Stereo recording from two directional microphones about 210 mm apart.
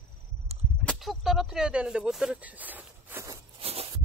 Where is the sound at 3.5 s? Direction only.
30° right (ahead or behind).